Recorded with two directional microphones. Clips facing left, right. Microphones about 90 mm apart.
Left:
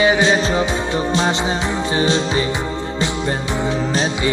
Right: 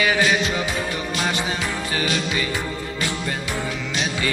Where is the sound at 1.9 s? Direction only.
30° left (ahead or behind).